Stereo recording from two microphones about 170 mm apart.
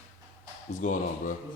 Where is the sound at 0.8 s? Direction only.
50° left (ahead or behind).